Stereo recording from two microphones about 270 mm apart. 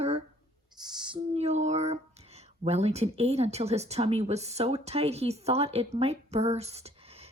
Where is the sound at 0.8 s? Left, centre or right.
Centre.